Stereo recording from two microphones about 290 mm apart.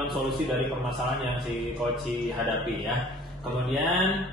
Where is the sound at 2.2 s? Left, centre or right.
Centre.